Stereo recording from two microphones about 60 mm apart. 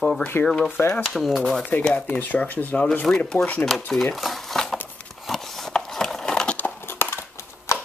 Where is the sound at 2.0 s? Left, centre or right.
Left; by 3.3 s centre.